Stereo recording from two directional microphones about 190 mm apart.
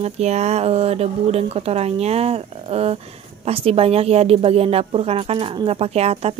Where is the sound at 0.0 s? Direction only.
35° right (ahead or behind).